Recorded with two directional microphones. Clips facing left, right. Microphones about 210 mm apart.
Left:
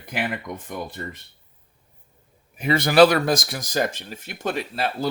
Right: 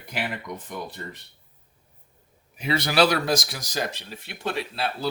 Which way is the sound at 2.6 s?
50° left (ahead or behind).